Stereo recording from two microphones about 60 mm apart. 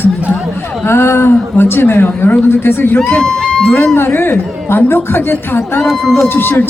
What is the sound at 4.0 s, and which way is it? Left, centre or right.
A woman's voice, left.